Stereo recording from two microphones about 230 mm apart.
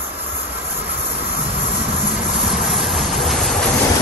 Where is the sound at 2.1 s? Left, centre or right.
Centre.